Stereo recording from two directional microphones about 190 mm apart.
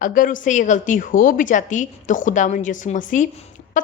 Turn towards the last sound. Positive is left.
turn(degrees=35)  # may be behind; listen again after turning